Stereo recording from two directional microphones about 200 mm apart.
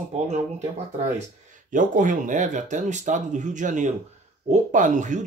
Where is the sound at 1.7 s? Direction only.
40° right (ahead or behind).